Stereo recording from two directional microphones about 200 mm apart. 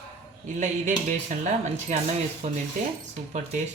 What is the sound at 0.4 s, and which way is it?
Speech, 35° right (ahead or behind).